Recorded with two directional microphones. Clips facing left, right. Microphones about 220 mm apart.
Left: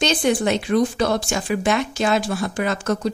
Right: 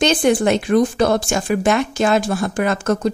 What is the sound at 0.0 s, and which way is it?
A woman's voice, 50° right (ahead or behind).